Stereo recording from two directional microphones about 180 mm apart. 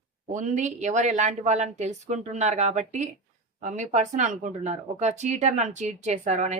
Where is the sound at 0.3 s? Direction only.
45° right (ahead or behind).